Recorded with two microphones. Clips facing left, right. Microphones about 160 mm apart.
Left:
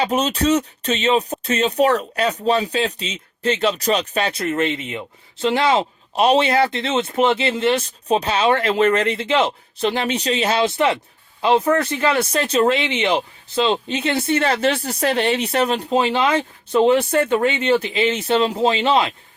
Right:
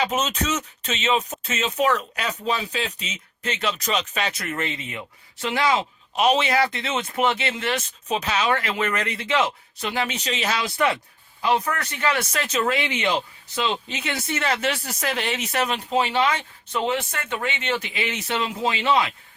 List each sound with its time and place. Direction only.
0.0 s speech: 35° left (ahead or behind)
17.8 s speech: 30° left (ahead or behind)